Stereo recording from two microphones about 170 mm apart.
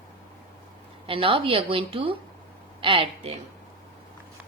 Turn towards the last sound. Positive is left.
turn(degrees=-30)  # may be behind; listen again after turning